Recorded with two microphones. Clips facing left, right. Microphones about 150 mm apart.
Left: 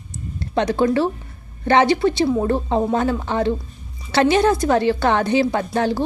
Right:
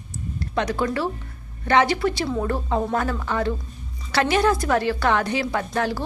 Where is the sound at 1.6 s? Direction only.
25° left (ahead or behind).